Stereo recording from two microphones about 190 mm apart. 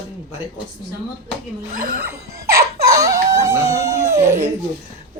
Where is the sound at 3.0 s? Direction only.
15° right (ahead or behind).